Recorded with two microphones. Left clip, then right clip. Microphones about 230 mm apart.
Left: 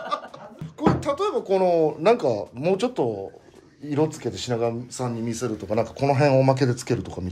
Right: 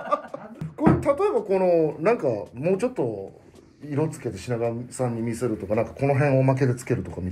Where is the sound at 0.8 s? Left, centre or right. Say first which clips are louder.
Right 2 dB; centre; by 4.8 s left.